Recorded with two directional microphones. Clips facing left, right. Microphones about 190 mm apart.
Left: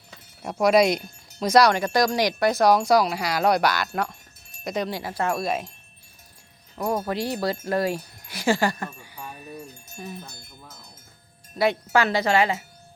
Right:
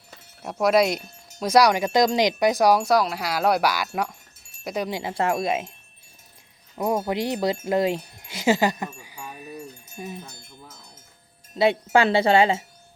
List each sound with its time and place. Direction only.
0.4 s speech: centre (ahead or behind)
4.9 s wind chime: 20° right (ahead or behind)
6.7 s wind chime: 20° right (ahead or behind)
11.6 s chime: 25° right (ahead or behind)
11.9 s wind chime: 30° right (ahead or behind)